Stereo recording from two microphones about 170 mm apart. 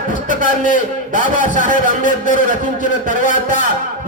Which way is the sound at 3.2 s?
45° left (ahead or behind).